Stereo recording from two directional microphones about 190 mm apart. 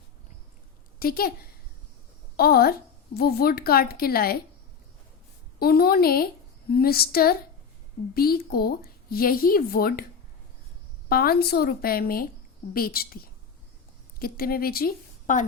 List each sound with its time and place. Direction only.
0.9 s a woman's voice: 50° left (ahead or behind)
2.3 s a woman's voice: 55° left (ahead or behind)
5.5 s speech: 55° left (ahead or behind)
11.1 s speech: 55° left (ahead or behind)
14.2 s a woman's voice: 50° left (ahead or behind)